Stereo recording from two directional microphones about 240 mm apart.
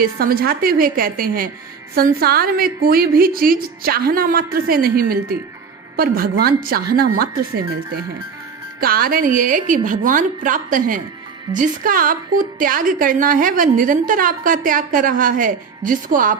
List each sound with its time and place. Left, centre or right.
0.0 s speech: right
8.8 s speech: right